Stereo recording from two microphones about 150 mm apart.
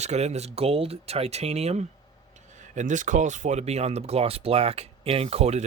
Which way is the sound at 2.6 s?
55° right (ahead or behind).